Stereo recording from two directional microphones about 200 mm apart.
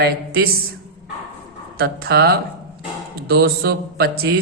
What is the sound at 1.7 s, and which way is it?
Mantra, 50° right (ahead or behind).